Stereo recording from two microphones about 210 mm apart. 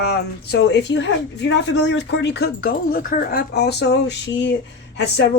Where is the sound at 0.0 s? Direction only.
50° left (ahead or behind).